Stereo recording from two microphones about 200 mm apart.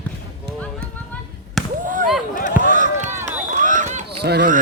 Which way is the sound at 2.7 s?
40° right (ahead or behind).